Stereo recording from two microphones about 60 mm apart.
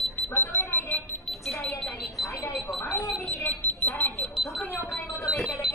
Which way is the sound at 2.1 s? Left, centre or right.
Centre.